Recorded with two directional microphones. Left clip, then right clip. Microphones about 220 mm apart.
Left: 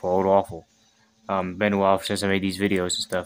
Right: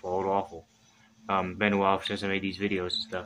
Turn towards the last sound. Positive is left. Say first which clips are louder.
# left 6 dB
turn(degrees=50)  # may be behind; listen again after turning